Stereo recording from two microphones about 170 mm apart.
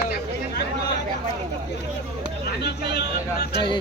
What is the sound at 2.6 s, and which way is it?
Speech, 75° left (ahead or behind).